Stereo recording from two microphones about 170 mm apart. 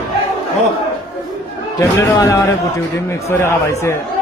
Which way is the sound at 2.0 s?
20° left (ahead or behind).